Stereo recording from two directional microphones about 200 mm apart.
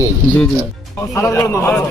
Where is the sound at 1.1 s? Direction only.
15° left (ahead or behind).